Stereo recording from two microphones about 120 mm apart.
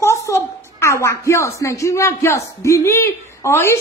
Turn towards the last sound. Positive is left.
turn(degrees=20)  # may be behind; listen again after turning